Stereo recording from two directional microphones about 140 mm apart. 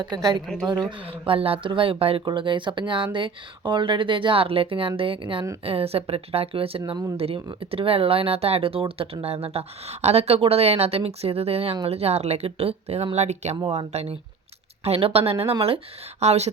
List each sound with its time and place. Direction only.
0.0 s speech: 30° right (ahead or behind)
0.4 s a woman's voice: 5° left (ahead or behind)
0.9 s speech: 40° right (ahead or behind)